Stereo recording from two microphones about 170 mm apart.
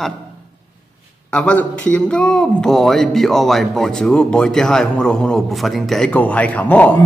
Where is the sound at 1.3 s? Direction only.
5° left (ahead or behind).